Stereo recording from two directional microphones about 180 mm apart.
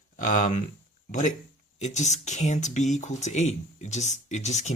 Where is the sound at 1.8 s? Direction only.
40° left (ahead or behind).